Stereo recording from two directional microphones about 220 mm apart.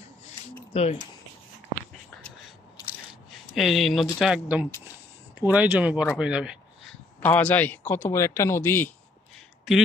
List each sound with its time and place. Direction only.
0.7 s speech: 30° left (ahead or behind)
3.5 s speech: centre (ahead or behind)
7.2 s a man's voice: 10° left (ahead or behind)